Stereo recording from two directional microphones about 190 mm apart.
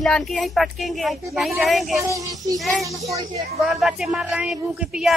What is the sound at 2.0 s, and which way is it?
Child singing, 20° right (ahead or behind).